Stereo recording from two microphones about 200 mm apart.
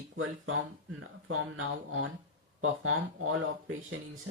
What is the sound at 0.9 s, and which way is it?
Speech, 90° right.